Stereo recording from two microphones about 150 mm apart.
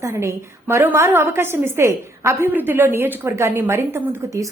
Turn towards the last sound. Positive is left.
turn(degrees=-15)  # may be behind; listen again after turning